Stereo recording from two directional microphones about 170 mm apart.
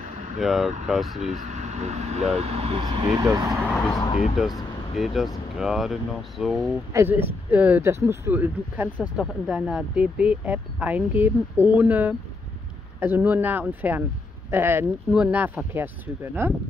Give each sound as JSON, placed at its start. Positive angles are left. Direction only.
{"t": 0.0, "sound": "vehicle", "side_deg": -45}
{"t": 0.4, "sound": "speech", "side_deg": 0}
{"t": 1.1, "sound": "speech", "side_deg": -45}
{"t": 4.4, "sound": "speech", "side_deg": 0}
{"t": 6.6, "sound": "speech", "side_deg": -15}